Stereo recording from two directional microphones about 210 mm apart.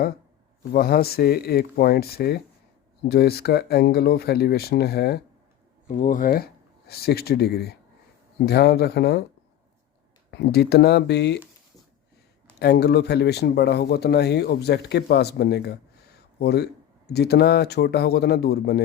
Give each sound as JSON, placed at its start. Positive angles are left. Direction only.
{"t": 0.7, "sound": "speech", "side_deg": 45}
{"t": 5.9, "sound": "speech", "side_deg": 35}
{"t": 10.3, "sound": "speech", "side_deg": 50}
{"t": 12.5, "sound": "speech", "side_deg": 50}